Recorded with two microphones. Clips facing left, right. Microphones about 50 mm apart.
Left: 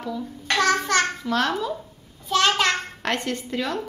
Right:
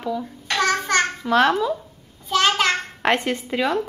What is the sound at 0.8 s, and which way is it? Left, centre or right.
Babbling, right.